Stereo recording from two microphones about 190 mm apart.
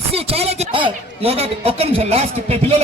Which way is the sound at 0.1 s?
30° right (ahead or behind).